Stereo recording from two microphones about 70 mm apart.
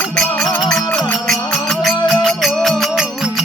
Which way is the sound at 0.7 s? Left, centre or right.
Centre.